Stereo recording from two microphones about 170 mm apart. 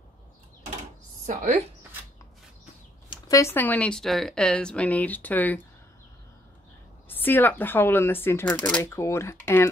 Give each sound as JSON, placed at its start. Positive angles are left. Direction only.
{"t": 1.2, "sound": "a woman's voice", "side_deg": -45}
{"t": 3.1, "sound": "speech", "side_deg": 20}
{"t": 7.1, "sound": "speech", "side_deg": 10}